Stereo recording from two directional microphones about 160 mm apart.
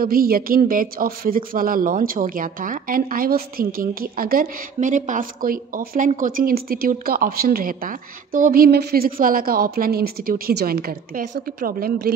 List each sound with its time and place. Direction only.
0.0 s a woman's voice: 65° right (ahead or behind)